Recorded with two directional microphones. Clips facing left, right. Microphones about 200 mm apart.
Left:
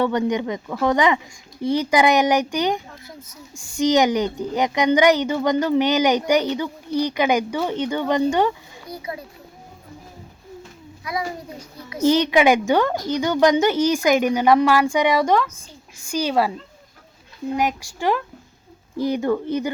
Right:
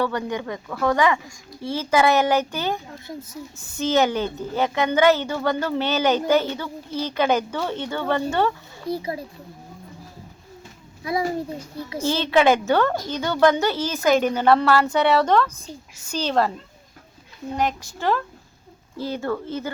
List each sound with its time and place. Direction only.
0.0 s a woman's voice: 20° left (ahead or behind)
8.9 s a child's voice: 30° right (ahead or behind)
11.0 s a child's voice: 30° right (ahead or behind)
12.0 s a woman's voice: 15° left (ahead or behind)
17.6 s a woman's voice: 10° left (ahead or behind)